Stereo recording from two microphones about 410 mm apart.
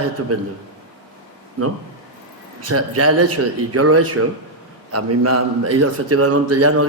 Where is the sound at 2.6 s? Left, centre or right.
Right.